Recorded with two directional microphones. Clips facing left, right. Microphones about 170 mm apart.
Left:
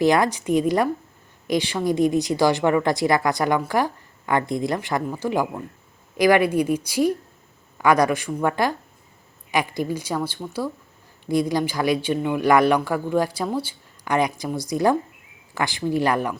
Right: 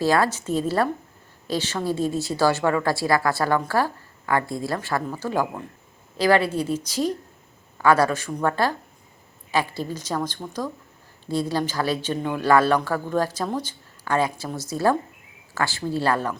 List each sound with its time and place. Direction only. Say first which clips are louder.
0.0 s a woman's voice: left 2 dB; 15° left (ahead or behind)